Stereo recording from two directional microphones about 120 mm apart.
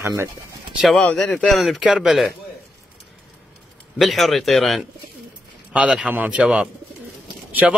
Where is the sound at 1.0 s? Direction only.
10° left (ahead or behind).